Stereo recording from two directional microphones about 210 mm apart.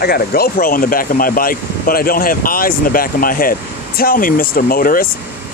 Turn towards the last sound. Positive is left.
turn(degrees=40)  # may be behind; listen again after turning